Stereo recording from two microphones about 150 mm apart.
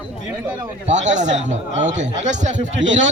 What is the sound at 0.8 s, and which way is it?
A man's voice, 50° right (ahead or behind).